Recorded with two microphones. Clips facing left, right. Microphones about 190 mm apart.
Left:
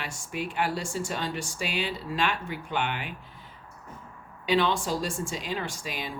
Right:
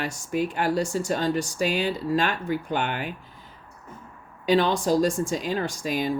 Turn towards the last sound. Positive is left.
turn(degrees=-40)  # may be behind; listen again after turning